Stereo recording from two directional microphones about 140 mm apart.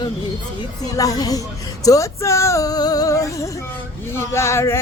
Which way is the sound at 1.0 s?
25° left (ahead or behind).